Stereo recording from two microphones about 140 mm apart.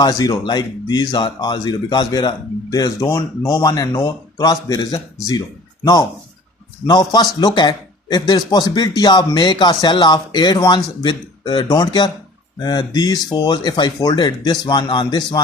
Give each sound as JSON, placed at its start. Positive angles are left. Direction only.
{"t": 0.0, "sound": "speech", "side_deg": 30}